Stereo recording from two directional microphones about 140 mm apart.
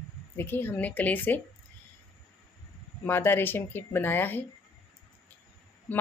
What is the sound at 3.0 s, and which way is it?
A woman's voice, 15° left (ahead or behind).